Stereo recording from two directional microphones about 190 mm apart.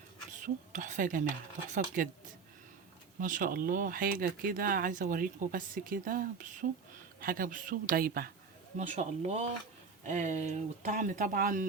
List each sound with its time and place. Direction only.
0.3 s speech: 45° right (ahead or behind)
3.2 s speech: 45° right (ahead or behind)
8.8 s speech: 40° right (ahead or behind)